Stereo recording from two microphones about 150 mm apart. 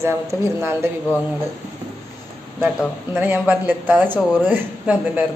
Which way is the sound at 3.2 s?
10° right (ahead or behind).